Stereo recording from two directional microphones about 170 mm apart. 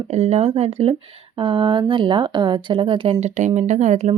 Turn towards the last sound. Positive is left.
turn(degrees=-45)  # may be behind; listen again after turning